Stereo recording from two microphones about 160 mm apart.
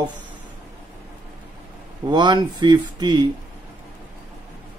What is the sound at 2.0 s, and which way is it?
Speech, 30° right (ahead or behind).